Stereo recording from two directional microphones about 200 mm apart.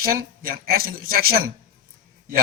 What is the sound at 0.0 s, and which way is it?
A man's voice, 45° right (ahead or behind).